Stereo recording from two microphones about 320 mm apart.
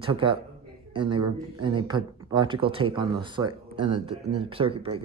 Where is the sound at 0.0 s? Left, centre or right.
Centre.